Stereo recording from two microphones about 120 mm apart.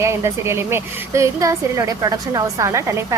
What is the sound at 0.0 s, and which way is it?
A woman's voice, 25° right (ahead or behind).